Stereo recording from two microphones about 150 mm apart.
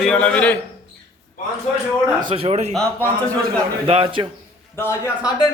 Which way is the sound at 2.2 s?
40° right (ahead or behind).